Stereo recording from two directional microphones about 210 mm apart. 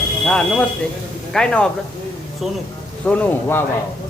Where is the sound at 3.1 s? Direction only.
10° left (ahead or behind).